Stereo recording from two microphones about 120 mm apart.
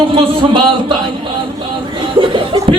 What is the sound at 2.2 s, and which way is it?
Laughter, 45° right (ahead or behind).